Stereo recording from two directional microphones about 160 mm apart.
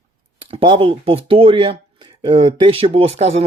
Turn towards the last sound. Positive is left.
turn(degrees=-40)  # may be behind; listen again after turning